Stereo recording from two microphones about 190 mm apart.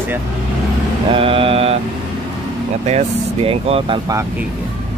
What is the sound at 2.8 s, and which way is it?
Speech, 30° right (ahead or behind).